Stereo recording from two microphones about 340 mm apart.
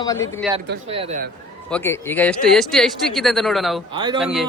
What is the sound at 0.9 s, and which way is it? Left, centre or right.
Speech, centre.